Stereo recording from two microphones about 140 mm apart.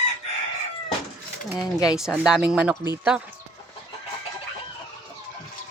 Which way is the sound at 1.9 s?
5° right (ahead or behind).